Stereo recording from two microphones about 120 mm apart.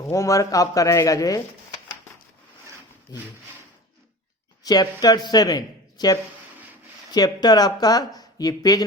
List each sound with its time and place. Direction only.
0.0 s a man's voice: 25° left (ahead or behind)
3.1 s speech: 30° left (ahead or behind)
4.6 s speech: 35° left (ahead or behind)